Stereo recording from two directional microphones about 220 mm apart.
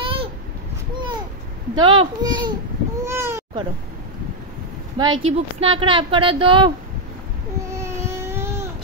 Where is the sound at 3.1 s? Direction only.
10° right (ahead or behind).